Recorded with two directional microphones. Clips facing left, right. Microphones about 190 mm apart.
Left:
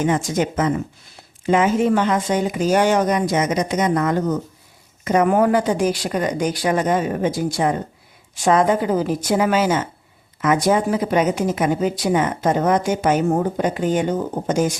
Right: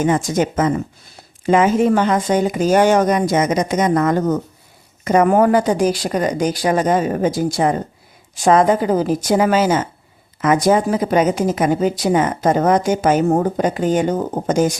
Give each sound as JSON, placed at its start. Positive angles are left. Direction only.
{"t": 0.0, "sound": "speech", "side_deg": -45}